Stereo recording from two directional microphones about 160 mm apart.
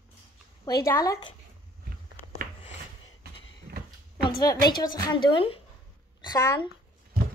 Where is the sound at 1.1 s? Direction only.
25° left (ahead or behind).